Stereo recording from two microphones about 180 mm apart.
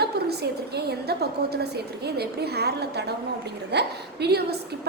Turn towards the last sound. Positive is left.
turn(degrees=-65)  # may be behind; listen again after turning